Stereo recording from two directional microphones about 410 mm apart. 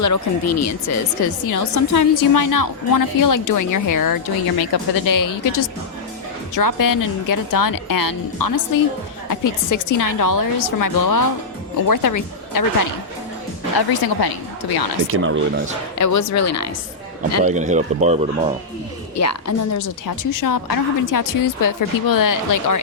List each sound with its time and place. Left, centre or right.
0.0 s speech: left
13.7 s speech: left
15.0 s speech: right
16.0 s a woman's voice: left
17.4 s speech: centre
19.1 s a woman's voice: left